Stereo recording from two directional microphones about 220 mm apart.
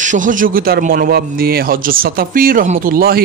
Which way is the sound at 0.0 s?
35° right (ahead or behind).